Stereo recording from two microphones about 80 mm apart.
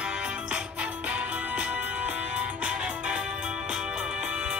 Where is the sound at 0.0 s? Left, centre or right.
Centre.